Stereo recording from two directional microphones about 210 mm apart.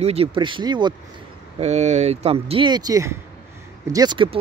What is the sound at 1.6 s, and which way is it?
Speech, 30° right (ahead or behind).